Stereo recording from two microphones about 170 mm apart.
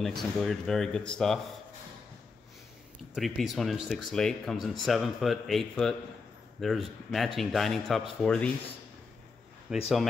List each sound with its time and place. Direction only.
0.0 s speech: centre (ahead or behind)
3.2 s speech: centre (ahead or behind)
9.7 s speech: 5° right (ahead or behind)